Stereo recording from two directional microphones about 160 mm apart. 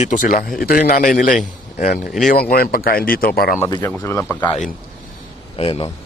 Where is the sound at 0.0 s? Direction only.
55° left (ahead or behind).